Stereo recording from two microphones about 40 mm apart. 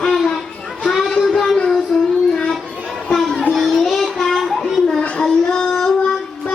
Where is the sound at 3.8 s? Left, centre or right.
Centre.